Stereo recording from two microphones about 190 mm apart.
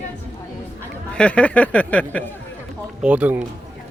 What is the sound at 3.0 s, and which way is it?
Speech, 5° right (ahead or behind).